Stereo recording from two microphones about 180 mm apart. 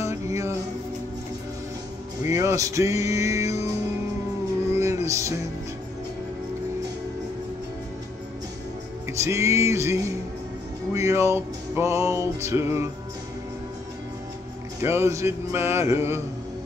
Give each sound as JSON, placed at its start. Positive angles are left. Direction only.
{"t": 0.0, "sound": "music", "side_deg": -15}
{"t": 2.2, "sound": "music", "side_deg": -15}
{"t": 4.7, "sound": "music", "side_deg": -15}
{"t": 9.1, "sound": "music", "side_deg": -15}
{"t": 14.8, "sound": "music", "side_deg": -15}